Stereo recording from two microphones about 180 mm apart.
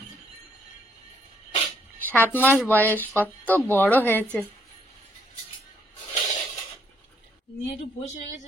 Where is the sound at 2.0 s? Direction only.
10° left (ahead or behind).